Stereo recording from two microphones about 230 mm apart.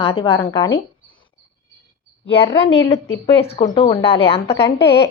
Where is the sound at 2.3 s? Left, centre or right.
Left.